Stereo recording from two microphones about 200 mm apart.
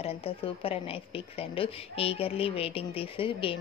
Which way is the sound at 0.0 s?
30° left (ahead or behind).